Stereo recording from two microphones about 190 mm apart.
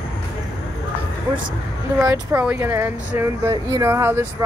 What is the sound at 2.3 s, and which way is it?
Speech, 10° right (ahead or behind).